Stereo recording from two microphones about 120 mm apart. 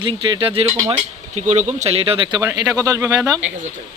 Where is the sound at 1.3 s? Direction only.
80° right; by 2.4 s 45° right (ahead or behind).